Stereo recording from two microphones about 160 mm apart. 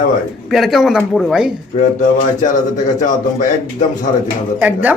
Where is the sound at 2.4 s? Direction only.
55° left (ahead or behind).